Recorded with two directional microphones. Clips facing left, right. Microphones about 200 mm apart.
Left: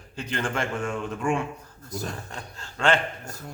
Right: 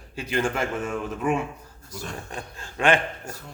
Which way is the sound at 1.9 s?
40° left (ahead or behind).